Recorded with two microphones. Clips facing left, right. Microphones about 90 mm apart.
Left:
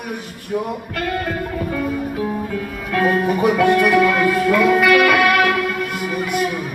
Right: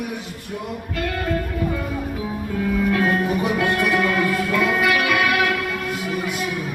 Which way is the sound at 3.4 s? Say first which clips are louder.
Left 6 dB; 55° left (ahead or behind).